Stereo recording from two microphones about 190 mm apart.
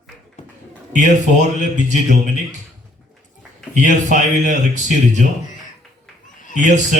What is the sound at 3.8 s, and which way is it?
Speech, 40° right (ahead or behind).